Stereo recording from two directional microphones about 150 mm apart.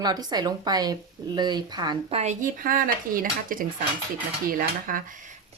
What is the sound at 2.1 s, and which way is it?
Speech, 50° right (ahead or behind).